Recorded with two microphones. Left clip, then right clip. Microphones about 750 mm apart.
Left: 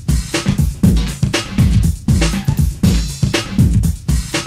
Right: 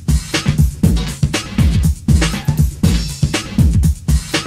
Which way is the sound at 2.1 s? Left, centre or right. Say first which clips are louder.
Even; left.